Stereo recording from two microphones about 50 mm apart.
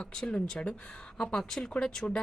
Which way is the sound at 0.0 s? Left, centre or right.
Centre.